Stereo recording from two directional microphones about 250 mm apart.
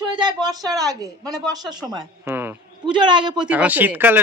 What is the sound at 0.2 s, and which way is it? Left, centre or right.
Speech, centre.